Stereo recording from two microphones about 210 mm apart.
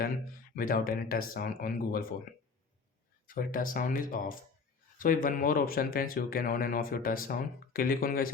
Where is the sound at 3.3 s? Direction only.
40° left (ahead or behind).